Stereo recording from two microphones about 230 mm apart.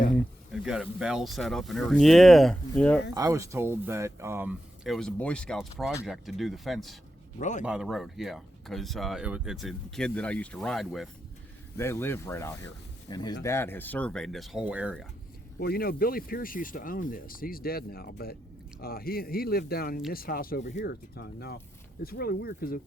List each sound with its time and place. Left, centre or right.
0.2 s speech: centre
3.2 s speech: centre
7.3 s speech: left
7.6 s speech: centre
15.5 s speech: left